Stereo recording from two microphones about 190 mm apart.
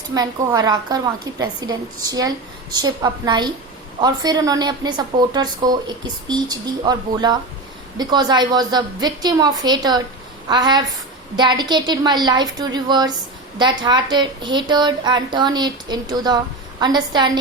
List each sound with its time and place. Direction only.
0.1 s a woman's voice: 20° right (ahead or behind)